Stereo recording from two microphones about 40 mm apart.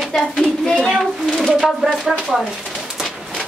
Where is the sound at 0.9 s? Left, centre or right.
Centre.